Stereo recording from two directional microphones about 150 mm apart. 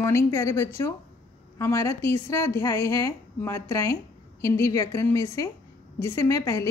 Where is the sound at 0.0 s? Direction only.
20° left (ahead or behind).